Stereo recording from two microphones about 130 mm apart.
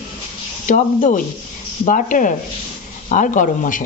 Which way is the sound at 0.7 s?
80° left.